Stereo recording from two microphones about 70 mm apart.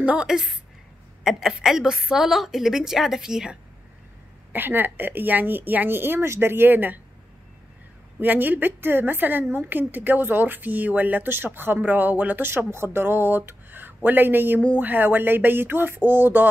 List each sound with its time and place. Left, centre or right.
0.0 s a woman's voice: centre
0.3 s a woman's voice: centre
4.5 s a woman's voice: right
8.2 s a woman's voice: right